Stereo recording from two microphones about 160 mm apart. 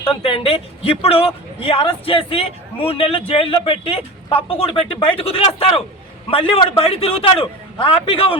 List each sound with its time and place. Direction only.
0.0 s speech: 35° left (ahead or behind)